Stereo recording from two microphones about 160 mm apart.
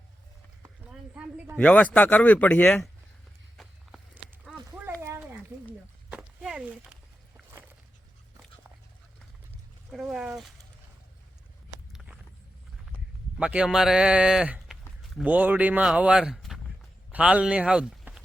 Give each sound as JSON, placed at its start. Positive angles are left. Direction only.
{"t": 1.5, "sound": "speech", "side_deg": 10}
{"t": 3.6, "sound": "walk", "side_deg": 0}
{"t": 4.7, "sound": "a sound", "side_deg": -15}
{"t": 6.1, "sound": "a sound", "side_deg": -5}
{"t": 9.9, "sound": "speech", "side_deg": 0}
{"t": 11.9, "sound": "vehicle", "side_deg": -5}
{"t": 13.4, "sound": "a man's voice", "side_deg": -5}